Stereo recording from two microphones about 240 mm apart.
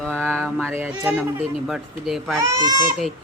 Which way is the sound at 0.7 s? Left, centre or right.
Centre.